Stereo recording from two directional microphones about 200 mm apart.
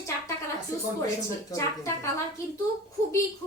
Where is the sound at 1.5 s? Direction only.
15° left (ahead or behind).